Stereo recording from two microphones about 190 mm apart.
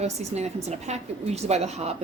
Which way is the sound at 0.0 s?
35° right (ahead or behind).